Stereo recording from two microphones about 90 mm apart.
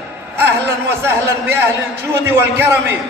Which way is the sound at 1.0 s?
25° right (ahead or behind).